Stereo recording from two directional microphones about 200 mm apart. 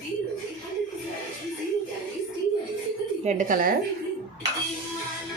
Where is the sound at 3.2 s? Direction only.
40° right (ahead or behind).